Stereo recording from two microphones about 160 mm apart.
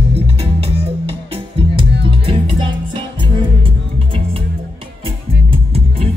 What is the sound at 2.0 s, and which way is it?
Music, 35° right (ahead or behind).